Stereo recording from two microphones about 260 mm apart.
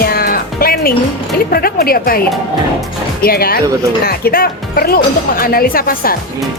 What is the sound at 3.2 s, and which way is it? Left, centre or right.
Speech, left.